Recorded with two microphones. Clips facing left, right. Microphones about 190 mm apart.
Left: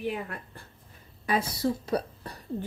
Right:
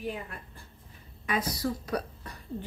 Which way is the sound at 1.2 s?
30° left (ahead or behind).